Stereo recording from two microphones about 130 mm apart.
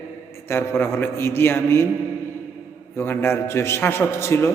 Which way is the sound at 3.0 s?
15° left (ahead or behind).